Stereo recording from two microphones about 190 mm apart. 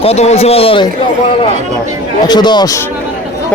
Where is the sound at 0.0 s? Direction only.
35° left (ahead or behind).